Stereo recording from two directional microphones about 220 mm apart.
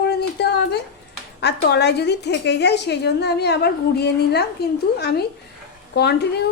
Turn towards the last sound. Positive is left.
turn(degrees=50)  # may be behind; listen again after turning